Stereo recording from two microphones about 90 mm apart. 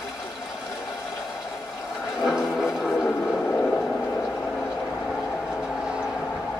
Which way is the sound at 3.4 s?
15° left (ahead or behind).